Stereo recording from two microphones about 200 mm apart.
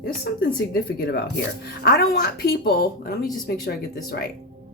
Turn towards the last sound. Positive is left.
turn(degrees=45)  # may be behind; listen again after turning